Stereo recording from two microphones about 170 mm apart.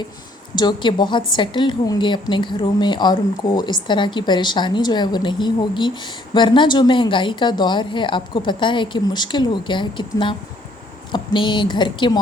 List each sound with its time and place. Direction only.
0.5 s speech: 25° left (ahead or behind)